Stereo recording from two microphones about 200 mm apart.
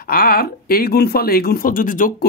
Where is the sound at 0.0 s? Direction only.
45° left (ahead or behind).